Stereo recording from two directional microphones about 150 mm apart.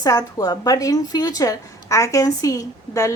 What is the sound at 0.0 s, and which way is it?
A woman's voice, 25° left (ahead or behind).